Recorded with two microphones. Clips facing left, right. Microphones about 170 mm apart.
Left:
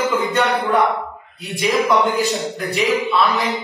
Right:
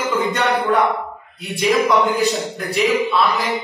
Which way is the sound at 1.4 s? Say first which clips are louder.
Right 2 dB; centre (ahead or behind).